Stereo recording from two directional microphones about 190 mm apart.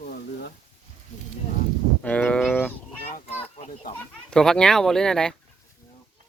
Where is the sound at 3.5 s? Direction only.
35° left (ahead or behind).